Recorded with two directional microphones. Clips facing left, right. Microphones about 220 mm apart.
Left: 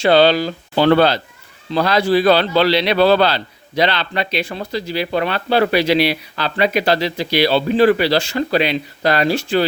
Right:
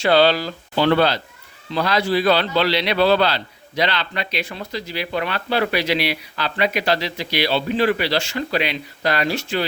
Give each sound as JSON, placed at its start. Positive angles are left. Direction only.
{"t": 0.0, "sound": "speech", "side_deg": 20}
{"t": 0.8, "sound": "speech", "side_deg": 40}